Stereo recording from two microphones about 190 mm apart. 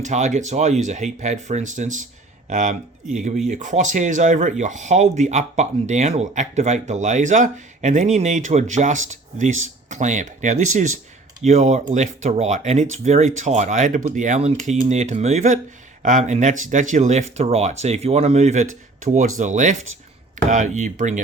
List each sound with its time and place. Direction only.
0.0 s speech: 40° right (ahead or behind)